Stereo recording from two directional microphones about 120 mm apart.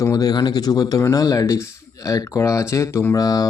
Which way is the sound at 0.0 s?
30° left (ahead or behind).